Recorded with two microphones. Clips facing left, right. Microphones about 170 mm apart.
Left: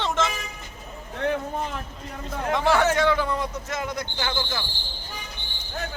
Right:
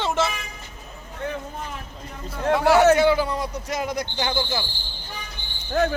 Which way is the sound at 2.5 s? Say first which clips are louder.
Right 5 dB; 10° right (ahead or behind).